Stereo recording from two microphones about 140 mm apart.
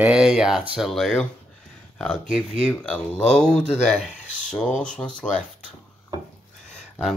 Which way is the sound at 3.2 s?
55° left (ahead or behind).